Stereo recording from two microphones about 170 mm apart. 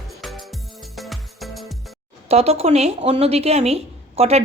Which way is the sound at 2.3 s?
35° right (ahead or behind).